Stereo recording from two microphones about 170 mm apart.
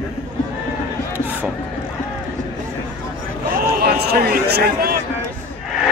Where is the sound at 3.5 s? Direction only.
65° right (ahead or behind).